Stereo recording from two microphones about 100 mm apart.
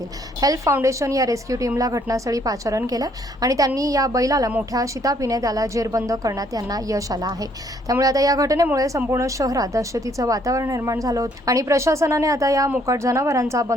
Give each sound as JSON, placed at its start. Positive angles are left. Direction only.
{"t": 0.3, "sound": "speech", "side_deg": -35}